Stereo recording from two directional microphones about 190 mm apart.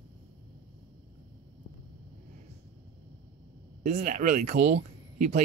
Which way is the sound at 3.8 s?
40° right (ahead or behind).